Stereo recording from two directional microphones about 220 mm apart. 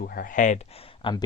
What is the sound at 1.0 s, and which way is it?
Speech, 20° left (ahead or behind).